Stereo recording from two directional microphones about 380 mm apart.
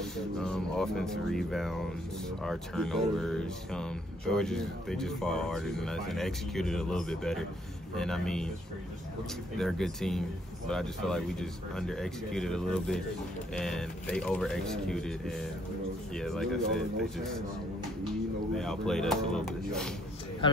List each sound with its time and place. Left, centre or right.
0.0 s speech: centre
9.6 s speech: centre
18.6 s speech: centre